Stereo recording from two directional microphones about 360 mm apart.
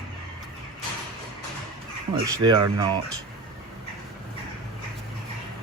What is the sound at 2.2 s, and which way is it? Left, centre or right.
Speech, centre.